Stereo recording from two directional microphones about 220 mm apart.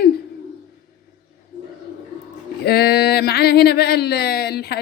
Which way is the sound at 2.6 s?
45° left (ahead or behind).